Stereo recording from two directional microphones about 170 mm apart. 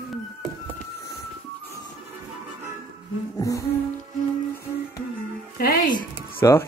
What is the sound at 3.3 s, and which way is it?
Music, 20° left (ahead or behind).